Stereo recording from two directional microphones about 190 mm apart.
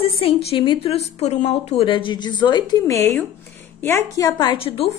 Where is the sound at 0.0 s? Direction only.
30° left (ahead or behind).